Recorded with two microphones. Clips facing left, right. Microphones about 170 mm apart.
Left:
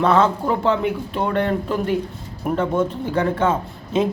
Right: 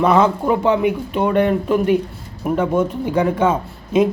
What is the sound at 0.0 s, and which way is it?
Speech, 15° right (ahead or behind).